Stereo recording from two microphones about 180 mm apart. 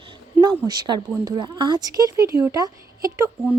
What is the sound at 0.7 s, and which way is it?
A woman's voice, 25° right (ahead or behind).